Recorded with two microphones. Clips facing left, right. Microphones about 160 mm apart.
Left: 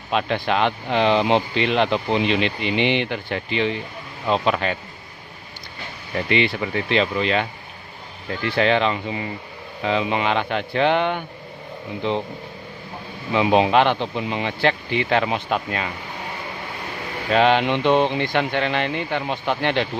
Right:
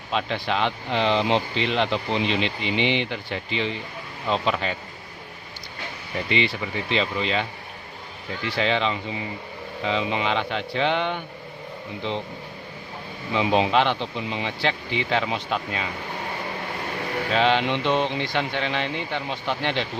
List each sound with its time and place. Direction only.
0.1 s speech: 60° left (ahead or behind)
6.2 s speech: 60° left (ahead or behind)
8.4 s speech: 55° left (ahead or behind)
13.3 s speech: 60° left (ahead or behind)
17.3 s speech: 55° left (ahead or behind)